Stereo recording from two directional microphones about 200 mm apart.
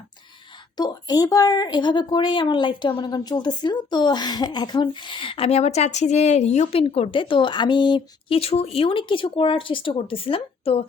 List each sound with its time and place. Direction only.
0.8 s a woman's voice: 20° left (ahead or behind)